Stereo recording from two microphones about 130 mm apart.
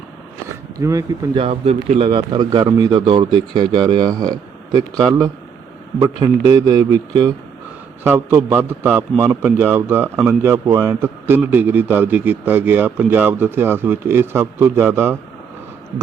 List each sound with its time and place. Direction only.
0.8 s speech: 25° right (ahead or behind)
1.4 s a man's voice: 50° right (ahead or behind); by 7.3 s 30° right (ahead or behind)
8.0 s a man's voice: 20° right (ahead or behind)